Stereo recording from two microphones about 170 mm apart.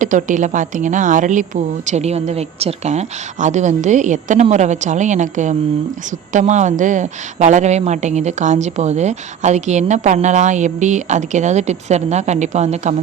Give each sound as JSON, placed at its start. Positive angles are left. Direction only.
{"t": 0.0, "sound": "a woman's voice", "side_deg": -50}